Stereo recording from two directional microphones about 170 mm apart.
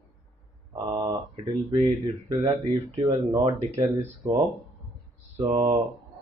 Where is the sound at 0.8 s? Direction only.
25° right (ahead or behind).